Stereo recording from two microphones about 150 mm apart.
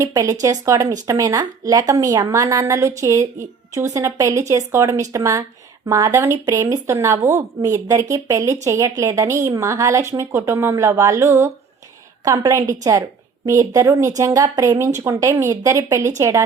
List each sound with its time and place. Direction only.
0.0 s a woman's voice: 20° right (ahead or behind)